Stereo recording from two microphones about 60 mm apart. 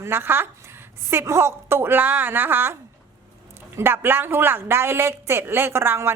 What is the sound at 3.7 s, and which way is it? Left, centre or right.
Speech, right.